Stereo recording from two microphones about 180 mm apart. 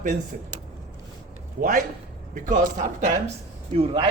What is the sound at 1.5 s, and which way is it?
A man's voice, 50° right (ahead or behind).